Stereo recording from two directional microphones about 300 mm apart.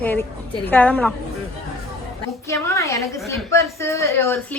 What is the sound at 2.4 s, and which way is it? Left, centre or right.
A woman's voice, centre.